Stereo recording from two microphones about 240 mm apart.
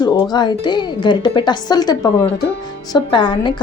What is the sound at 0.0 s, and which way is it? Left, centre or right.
A woman's voice, centre.